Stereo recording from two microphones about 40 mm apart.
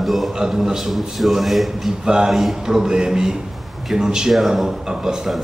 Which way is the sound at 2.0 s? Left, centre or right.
Centre.